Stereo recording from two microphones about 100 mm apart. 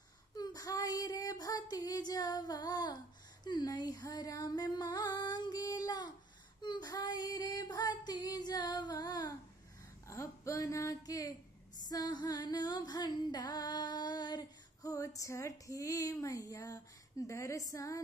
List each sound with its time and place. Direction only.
0.4 s child singing: 40° left (ahead or behind)
3.4 s a sound: 45° left (ahead or behind)
6.6 s female singing: 45° left (ahead or behind)
10.0 s speech: 30° left (ahead or behind)